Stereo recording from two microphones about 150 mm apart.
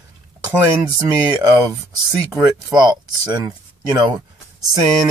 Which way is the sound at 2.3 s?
25° right (ahead or behind).